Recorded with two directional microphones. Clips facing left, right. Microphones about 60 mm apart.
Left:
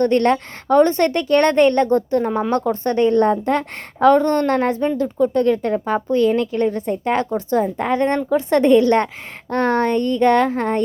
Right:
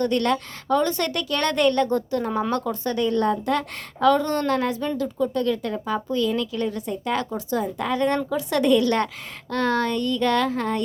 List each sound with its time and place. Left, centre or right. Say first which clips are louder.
0.0 s a woman's voice: left 6 dB; left